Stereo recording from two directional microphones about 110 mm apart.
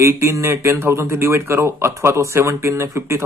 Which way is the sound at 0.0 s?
25° right (ahead or behind).